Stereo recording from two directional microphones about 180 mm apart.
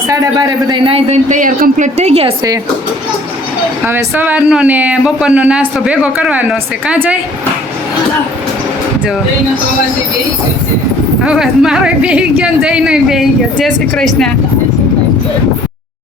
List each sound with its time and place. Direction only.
0.1 s a man's voice: 20° right (ahead or behind)
3.8 s speech: 10° right (ahead or behind)
11.2 s a woman's voice: 5° right (ahead or behind)